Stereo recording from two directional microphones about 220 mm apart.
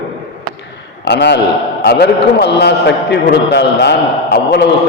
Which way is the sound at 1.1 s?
50° left (ahead or behind).